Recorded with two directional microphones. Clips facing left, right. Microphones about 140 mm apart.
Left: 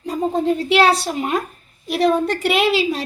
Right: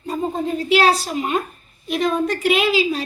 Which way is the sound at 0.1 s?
70° left (ahead or behind).